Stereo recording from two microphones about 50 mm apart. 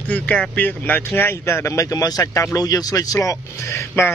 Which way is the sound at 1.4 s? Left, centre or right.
Left.